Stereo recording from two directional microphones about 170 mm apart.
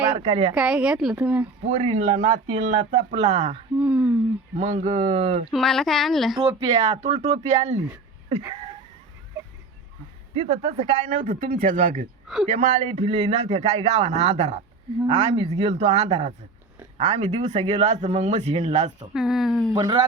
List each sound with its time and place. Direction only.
0.2 s a man's voice: 40° right (ahead or behind)
0.5 s speech: 5° right (ahead or behind)
1.6 s a man's voice: 40° right (ahead or behind)
3.8 s a sound: 10° right (ahead or behind)
4.5 s speech: 45° right (ahead or behind)
5.5 s speech: centre (ahead or behind)
6.6 s a man's voice: 40° right (ahead or behind)
10.3 s a man's voice: 35° right (ahead or behind)
12.3 s speech: centre (ahead or behind)
12.7 s a man's voice: 45° right (ahead or behind)
19.1 s speech: centre (ahead or behind)
19.7 s speech: 25° right (ahead or behind)